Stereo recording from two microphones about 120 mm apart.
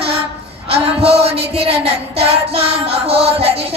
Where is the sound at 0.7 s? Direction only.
55° right (ahead or behind).